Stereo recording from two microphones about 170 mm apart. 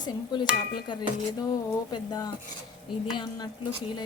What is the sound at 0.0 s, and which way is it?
Speech, 25° left (ahead or behind).